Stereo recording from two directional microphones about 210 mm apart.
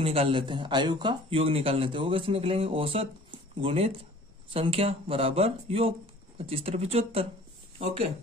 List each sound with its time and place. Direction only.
0.0 s speech: 25° right (ahead or behind)